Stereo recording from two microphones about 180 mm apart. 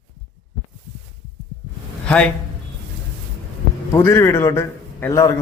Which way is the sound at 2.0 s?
5° left (ahead or behind).